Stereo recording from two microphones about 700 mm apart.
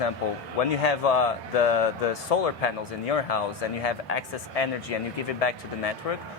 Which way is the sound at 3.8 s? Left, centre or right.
Left.